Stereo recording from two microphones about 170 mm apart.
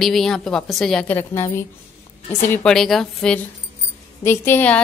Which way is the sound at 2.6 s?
Centre (ahead or behind).